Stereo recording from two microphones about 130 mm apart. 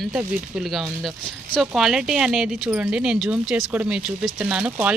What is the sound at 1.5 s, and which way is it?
Speech, centre (ahead or behind).